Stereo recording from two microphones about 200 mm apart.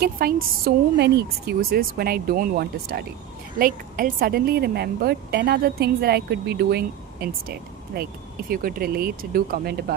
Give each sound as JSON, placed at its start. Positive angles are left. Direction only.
{"t": 0.0, "sound": "speech", "side_deg": -50}